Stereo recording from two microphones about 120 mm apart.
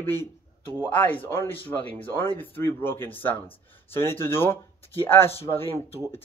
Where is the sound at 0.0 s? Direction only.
20° left (ahead or behind).